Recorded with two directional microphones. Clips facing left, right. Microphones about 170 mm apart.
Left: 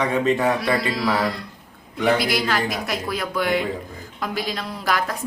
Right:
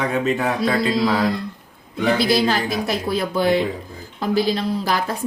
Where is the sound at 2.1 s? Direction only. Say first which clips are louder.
Right 4 dB; 30° right (ahead or behind).